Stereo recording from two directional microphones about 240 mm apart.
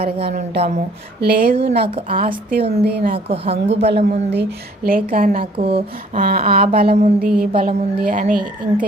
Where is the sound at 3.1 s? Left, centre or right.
Right.